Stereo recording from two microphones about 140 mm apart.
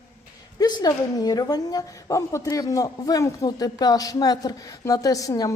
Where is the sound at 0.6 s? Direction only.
30° left (ahead or behind).